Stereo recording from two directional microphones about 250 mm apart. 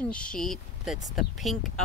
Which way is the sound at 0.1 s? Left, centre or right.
Centre.